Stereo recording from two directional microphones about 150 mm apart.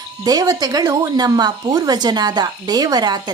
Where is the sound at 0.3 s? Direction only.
25° right (ahead or behind).